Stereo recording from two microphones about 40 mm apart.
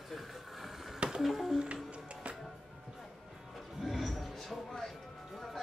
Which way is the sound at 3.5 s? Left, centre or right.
Centre.